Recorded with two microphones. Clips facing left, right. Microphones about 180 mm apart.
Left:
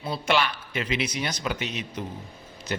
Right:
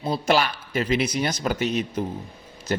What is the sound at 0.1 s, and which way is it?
Speech, 40° right (ahead or behind).